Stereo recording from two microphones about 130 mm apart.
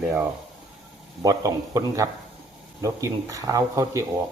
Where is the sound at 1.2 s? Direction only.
25° right (ahead or behind).